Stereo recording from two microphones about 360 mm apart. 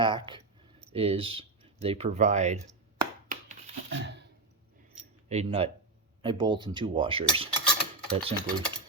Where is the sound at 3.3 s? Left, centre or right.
Centre.